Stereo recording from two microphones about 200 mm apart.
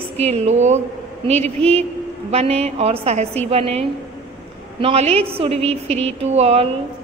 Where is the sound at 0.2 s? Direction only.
30° right (ahead or behind).